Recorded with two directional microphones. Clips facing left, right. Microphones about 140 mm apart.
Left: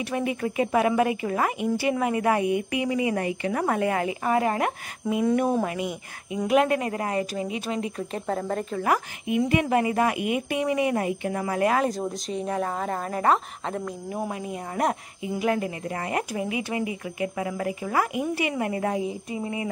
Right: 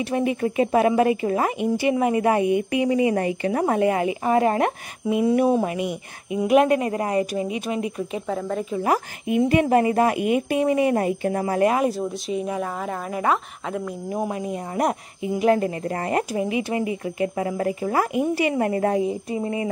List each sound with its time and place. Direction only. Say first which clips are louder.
0.0 s speech: right 4 dB; 30° right (ahead or behind)
5.0 s speech: right 3 dB; 10° right (ahead or behind)
5.6 s speech: right 3 dB; 20° right (ahead or behind)
8.1 s speech: right 2 dB; centre (ahead or behind)
8.7 s a woman's voice: right 3 dB; 30° right (ahead or behind)
12.3 s speech: right 1 dB; 5° right (ahead or behind)
14.1 s speech: right 5 dB; 15° right (ahead or behind)
15.4 s a woman's voice: right 6 dB; 40° right (ahead or behind)